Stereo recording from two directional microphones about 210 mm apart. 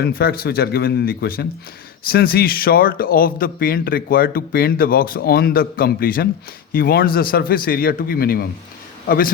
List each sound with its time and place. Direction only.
0.0 s a man's voice: 45° left (ahead or behind)